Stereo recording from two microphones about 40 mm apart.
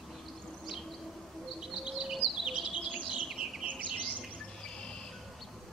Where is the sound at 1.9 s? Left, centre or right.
Centre.